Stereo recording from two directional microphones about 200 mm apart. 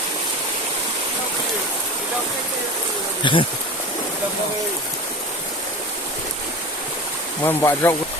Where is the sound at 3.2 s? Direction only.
25° left (ahead or behind).